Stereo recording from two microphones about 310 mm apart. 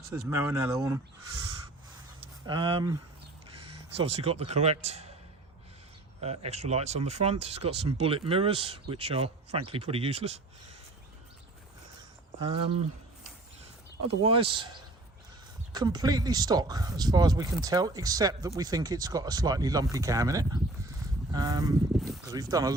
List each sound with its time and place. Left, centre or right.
0.1 s speech: centre
2.5 s speech: centre
6.2 s speech: centre
12.4 s speech: centre
14.4 s speech: centre
15.7 s speech: centre